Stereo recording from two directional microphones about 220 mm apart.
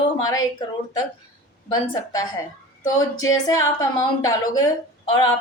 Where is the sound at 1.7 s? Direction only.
15° left (ahead or behind).